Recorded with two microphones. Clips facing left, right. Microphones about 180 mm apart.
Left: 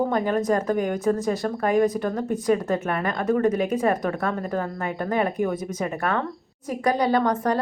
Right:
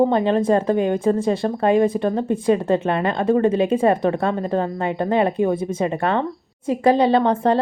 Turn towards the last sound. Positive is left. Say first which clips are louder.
# right 5 dB
turn(degrees=-25)  # may be behind; listen again after turning